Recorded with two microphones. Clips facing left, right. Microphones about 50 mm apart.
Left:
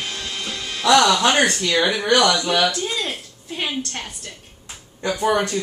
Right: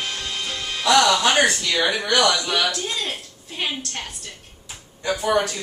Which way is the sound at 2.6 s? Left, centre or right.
Centre.